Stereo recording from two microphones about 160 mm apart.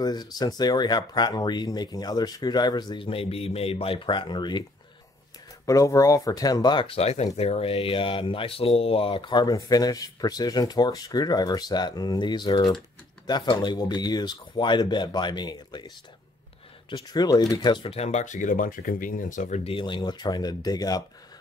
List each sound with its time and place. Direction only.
0.0 s speech: 25° left (ahead or behind)
5.7 s speech: 20° left (ahead or behind)
16.9 s speech: 25° left (ahead or behind); by 19.6 s 50° left (ahead or behind)
19.6 s speech: 35° left (ahead or behind)